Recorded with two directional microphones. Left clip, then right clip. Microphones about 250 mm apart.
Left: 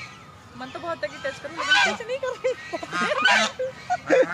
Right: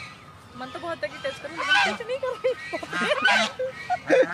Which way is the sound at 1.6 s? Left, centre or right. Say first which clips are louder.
Left 1 dB; left.